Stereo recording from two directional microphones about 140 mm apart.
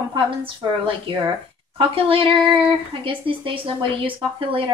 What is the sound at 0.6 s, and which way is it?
Speech, 35° right (ahead or behind).